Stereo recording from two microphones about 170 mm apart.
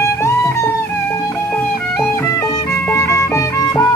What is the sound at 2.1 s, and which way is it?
Music, 15° left (ahead or behind).